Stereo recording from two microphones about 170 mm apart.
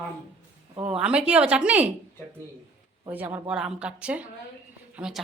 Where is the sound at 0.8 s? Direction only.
5° right (ahead or behind).